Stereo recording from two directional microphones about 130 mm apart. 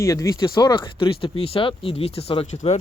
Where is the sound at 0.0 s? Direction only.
25° left (ahead or behind); by 2.6 s 50° left (ahead or behind).